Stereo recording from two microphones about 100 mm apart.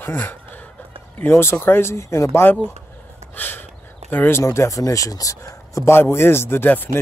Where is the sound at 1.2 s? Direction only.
25° left (ahead or behind).